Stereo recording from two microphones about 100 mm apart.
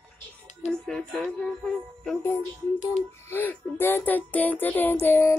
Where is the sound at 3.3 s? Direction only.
20° left (ahead or behind).